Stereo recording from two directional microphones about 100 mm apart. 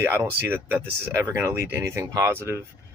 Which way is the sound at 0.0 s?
20° right (ahead or behind).